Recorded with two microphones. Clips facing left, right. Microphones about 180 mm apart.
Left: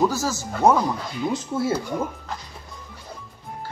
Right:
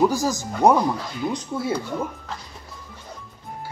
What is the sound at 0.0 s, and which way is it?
Speech, 15° right (ahead or behind).